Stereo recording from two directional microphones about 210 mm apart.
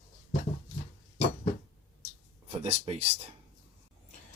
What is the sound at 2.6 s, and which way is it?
Speech, 30° right (ahead or behind).